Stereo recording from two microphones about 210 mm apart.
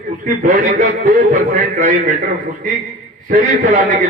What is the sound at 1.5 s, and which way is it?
Speech, 35° right (ahead or behind).